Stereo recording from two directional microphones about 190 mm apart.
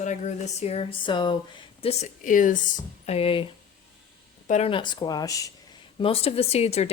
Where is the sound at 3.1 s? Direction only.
30° left (ahead or behind).